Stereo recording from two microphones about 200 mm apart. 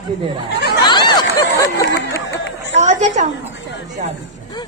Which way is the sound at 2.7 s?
35° right (ahead or behind).